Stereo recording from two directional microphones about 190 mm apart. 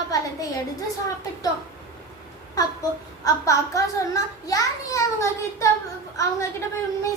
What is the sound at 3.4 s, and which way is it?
A child's voice, 15° left (ahead or behind).